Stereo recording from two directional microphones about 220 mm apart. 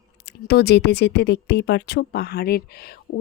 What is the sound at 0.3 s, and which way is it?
Speech, 50° left (ahead or behind).